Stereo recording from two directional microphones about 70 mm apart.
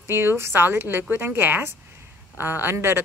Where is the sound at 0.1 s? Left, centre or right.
Right.